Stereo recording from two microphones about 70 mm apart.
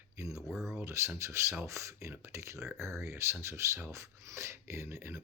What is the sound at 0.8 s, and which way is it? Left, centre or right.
Speech, right.